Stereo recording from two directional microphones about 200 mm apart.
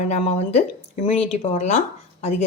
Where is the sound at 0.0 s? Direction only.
30° left (ahead or behind).